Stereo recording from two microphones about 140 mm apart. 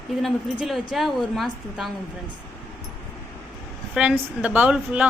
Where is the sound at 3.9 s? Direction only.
10° right (ahead or behind).